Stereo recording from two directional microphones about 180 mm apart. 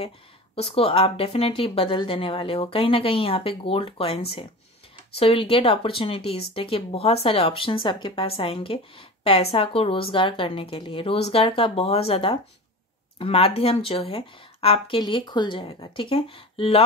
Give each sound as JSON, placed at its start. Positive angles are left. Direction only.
{"t": 0.6, "sound": "speech", "side_deg": 30}